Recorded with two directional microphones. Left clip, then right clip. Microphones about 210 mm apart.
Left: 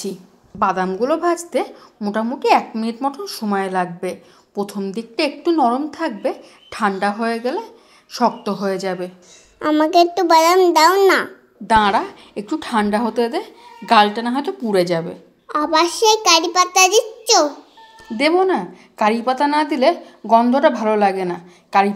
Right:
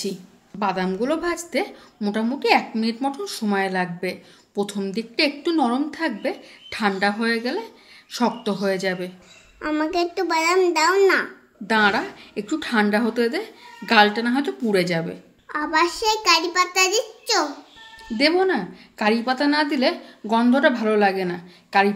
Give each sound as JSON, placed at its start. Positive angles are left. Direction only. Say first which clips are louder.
{"t": 0.6, "sound": "a woman's voice", "louder": "left 5 dB", "side_deg": 10}
{"t": 9.6, "sound": "a woman's voice", "louder": "left 9 dB", "side_deg": 25}
{"t": 18.1, "sound": "a woman's voice", "louder": "left 3 dB", "side_deg": 15}